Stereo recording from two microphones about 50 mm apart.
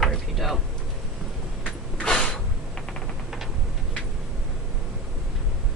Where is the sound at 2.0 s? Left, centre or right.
Left.